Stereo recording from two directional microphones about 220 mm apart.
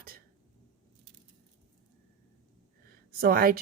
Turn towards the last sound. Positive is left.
turn(degrees=-40)  # may be behind; listen again after turning